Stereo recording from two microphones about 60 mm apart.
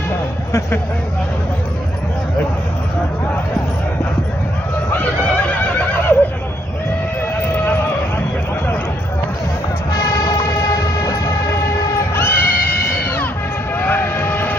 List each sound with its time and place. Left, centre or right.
5.2 s neigh: left
9.9 s vehicle: left
12.2 s neigh: left
13.7 s vehicle: left